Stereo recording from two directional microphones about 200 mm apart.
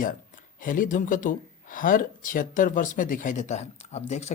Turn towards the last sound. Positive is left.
turn(degrees=35)  # may be behind; listen again after turning